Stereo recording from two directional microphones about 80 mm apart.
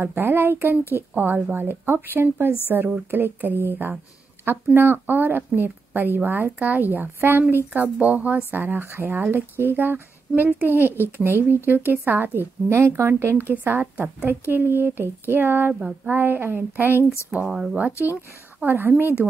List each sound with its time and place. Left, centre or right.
0.0 s speech: right
14.4 s speech: right
15.7 s child singing: centre
16.1 s speech: right
17.3 s child singing: centre
18.1 s speech: right